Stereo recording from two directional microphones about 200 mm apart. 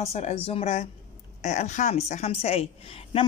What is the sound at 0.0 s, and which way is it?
A woman's voice, 35° left (ahead or behind).